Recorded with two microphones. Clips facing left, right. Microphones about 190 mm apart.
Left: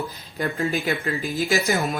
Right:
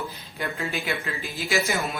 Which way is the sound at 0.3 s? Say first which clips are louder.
Left 6 dB; 40° left (ahead or behind).